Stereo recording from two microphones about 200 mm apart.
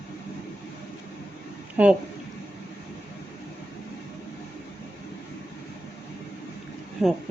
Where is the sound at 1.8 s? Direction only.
10° right (ahead or behind).